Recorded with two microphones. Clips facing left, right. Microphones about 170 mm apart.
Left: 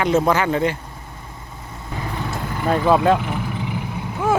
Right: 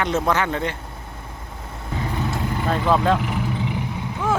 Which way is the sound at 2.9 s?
10° left (ahead or behind).